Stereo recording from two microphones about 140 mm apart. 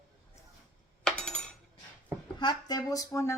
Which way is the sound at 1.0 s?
5° left (ahead or behind).